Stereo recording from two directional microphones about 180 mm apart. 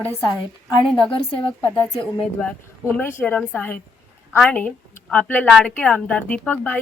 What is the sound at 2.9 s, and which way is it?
A woman's voice, 10° left (ahead or behind).